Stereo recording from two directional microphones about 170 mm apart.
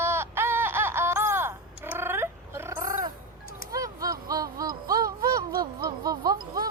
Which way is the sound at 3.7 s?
20° right (ahead or behind).